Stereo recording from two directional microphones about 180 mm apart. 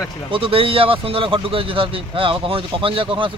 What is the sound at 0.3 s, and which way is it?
Speech, 30° right (ahead or behind).